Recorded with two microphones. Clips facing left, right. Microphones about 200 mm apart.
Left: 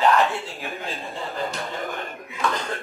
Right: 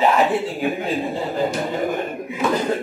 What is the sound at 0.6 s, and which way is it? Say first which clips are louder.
Speech: right 10 dB; 15° right (ahead or behind).